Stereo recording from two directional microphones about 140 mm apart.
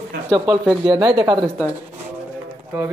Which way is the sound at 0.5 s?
30° right (ahead or behind).